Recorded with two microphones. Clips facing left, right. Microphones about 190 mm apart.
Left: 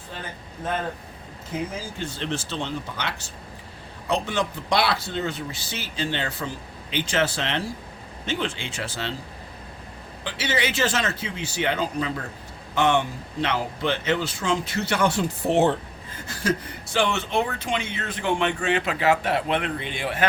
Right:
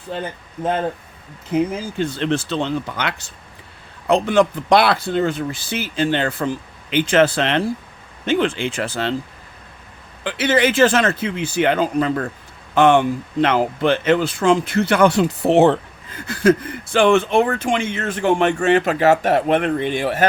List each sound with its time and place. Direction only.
2.0 s speech: 60° right (ahead or behind)
10.2 s speech: 50° right (ahead or behind)